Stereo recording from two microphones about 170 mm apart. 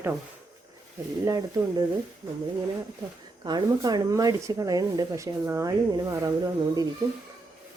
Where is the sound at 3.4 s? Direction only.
25° right (ahead or behind).